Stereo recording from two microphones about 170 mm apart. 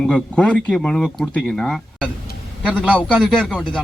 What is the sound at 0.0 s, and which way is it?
Speech, 5° left (ahead or behind).